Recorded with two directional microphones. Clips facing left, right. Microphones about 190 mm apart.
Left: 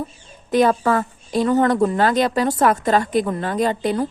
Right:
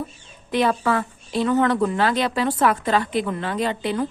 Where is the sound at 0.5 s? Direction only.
40° left (ahead or behind).